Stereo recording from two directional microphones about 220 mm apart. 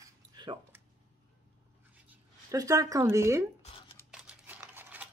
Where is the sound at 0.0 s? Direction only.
15° right (ahead or behind).